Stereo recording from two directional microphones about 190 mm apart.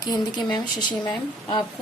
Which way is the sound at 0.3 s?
20° left (ahead or behind).